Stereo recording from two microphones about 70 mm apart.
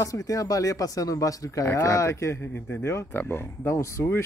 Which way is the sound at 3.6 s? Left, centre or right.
Left.